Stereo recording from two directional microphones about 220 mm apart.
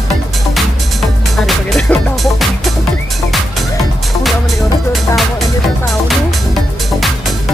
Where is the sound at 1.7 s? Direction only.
Centre (ahead or behind).